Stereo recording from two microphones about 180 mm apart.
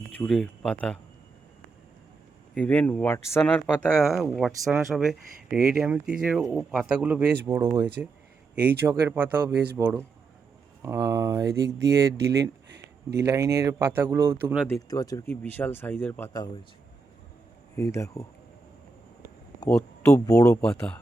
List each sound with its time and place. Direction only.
0.2 s speech: 5° left (ahead or behind)
2.6 s speech: 10° left (ahead or behind); by 11.4 s 20° right (ahead or behind)
12.4 s a sound: 65° right (ahead or behind)
13.2 s speech: 15° right (ahead or behind)
14.7 s speech: 20° left (ahead or behind)
17.7 s speech: 15° left (ahead or behind)
19.6 s speech: 15° left (ahead or behind)
20.6 s speech: 5° left (ahead or behind)